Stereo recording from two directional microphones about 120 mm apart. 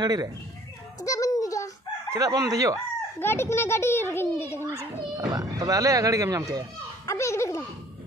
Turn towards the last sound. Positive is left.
turn(degrees=25)  # may be behind; listen again after turning